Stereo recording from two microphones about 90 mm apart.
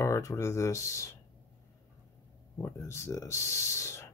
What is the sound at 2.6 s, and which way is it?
Speech, 35° left (ahead or behind).